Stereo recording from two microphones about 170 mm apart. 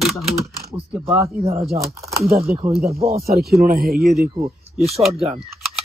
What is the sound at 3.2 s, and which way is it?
Speech, 65° right (ahead or behind).